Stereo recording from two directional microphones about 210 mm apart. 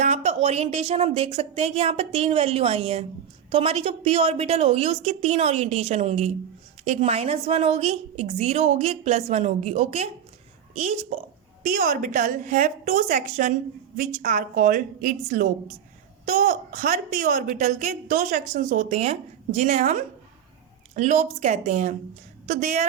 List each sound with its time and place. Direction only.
0.0 s a woman's voice: 30° right (ahead or behind)